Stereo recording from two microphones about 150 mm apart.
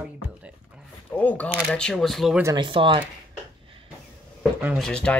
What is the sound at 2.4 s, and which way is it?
Speech, 30° right (ahead or behind).